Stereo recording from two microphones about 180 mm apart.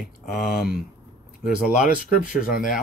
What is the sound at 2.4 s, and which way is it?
Speech, 50° left (ahead or behind).